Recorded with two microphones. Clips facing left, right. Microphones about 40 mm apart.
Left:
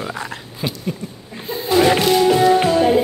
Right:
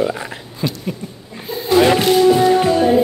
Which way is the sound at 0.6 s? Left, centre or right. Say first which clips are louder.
Right 3 dB; centre.